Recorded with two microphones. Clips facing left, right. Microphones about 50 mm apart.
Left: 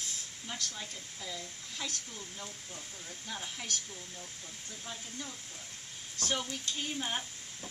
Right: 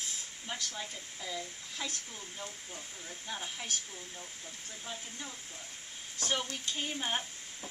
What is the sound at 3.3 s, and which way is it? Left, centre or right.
Speech, centre.